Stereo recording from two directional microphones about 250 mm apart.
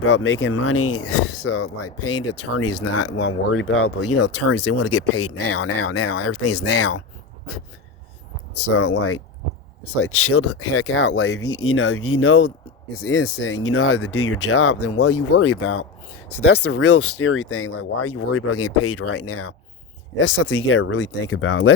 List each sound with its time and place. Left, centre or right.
0.0 s speech: left
2.7 s speech: left
4.5 s speech: left
5.5 s speech: left
6.0 s speech: left
6.7 s speech: left
8.5 s speech: left
20.1 s speech: left
21.1 s speech: left